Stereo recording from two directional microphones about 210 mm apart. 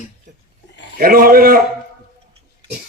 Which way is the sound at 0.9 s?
45° right (ahead or behind).